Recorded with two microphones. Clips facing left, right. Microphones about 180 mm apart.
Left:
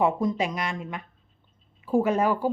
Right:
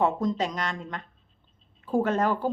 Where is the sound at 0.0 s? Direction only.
10° left (ahead or behind).